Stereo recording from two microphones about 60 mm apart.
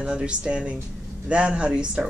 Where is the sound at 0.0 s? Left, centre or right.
Centre.